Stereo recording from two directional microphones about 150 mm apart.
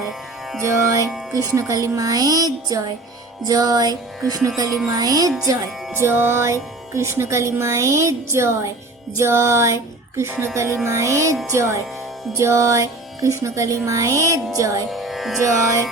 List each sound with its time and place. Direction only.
0.6 s speech: 20° right (ahead or behind)
9.1 s music: 20° right (ahead or behind)
10.8 s speech: 20° right (ahead or behind)
14.8 s music: centre (ahead or behind)